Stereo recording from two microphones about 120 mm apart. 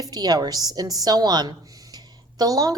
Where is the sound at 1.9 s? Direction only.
35° right (ahead or behind).